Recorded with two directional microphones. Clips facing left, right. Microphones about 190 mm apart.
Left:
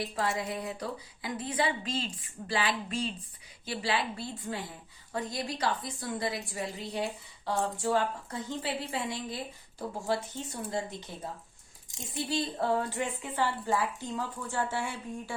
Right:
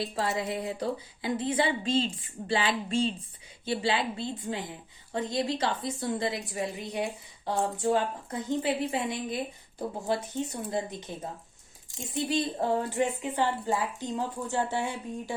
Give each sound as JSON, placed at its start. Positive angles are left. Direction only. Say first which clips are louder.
{"t": 0.0, "sound": "a woman's voice", "louder": "right 2 dB", "side_deg": -25}